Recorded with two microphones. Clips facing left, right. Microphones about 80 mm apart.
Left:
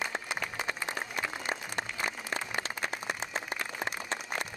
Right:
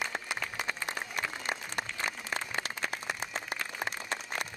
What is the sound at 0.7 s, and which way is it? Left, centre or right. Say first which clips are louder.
Applause: left 1 dB; left.